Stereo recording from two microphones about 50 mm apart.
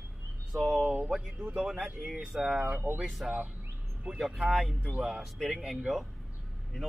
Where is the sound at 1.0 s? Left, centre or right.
Centre.